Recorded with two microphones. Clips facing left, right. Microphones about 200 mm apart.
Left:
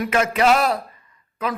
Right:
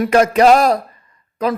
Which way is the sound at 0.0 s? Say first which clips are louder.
Right 7 dB; 40° right (ahead or behind).